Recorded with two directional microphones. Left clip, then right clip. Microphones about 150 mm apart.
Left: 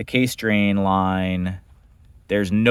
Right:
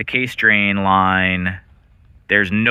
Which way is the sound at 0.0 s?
30° left (ahead or behind).